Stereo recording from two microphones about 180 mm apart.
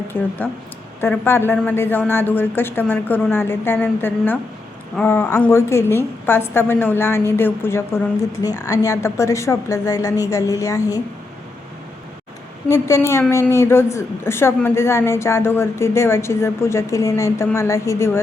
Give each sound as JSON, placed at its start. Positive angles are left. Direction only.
{"t": 0.1, "sound": "a woman's voice", "side_deg": 10}
{"t": 12.6, "sound": "a woman's voice", "side_deg": 15}